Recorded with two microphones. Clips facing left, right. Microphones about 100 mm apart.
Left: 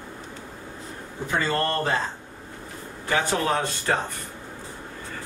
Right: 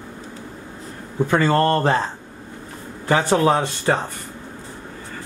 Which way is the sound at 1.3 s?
45° right (ahead or behind).